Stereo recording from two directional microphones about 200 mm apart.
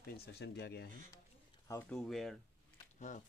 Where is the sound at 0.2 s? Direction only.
55° left (ahead or behind).